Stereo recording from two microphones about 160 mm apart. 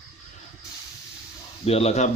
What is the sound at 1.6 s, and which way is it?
Speech, 40° left (ahead or behind).